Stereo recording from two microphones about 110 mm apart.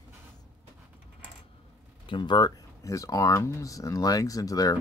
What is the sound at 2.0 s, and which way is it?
Speech, 45° left (ahead or behind).